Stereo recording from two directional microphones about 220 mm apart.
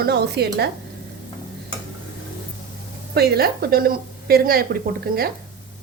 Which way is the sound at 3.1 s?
45° right (ahead or behind).